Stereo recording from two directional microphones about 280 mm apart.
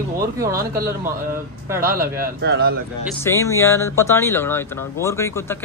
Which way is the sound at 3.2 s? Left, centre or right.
Centre.